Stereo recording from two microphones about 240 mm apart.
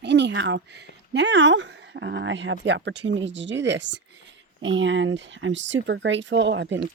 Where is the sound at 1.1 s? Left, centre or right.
Right.